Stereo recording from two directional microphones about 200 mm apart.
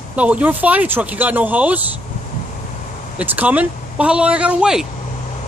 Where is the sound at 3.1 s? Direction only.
10° right (ahead or behind).